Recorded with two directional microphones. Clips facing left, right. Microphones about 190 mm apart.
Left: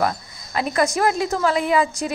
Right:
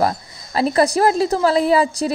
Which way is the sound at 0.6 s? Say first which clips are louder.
Right 4 dB; 35° right (ahead or behind).